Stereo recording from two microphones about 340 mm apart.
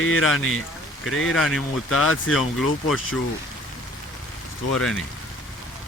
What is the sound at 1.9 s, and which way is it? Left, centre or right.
Speech, left.